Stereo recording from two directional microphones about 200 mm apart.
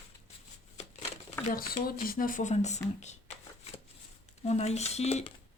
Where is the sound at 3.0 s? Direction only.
35° left (ahead or behind).